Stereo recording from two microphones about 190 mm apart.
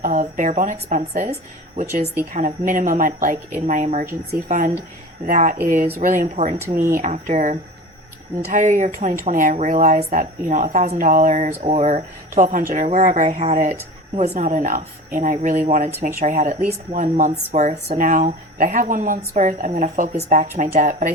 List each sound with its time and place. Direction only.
0.0 s speech: 40° right (ahead or behind)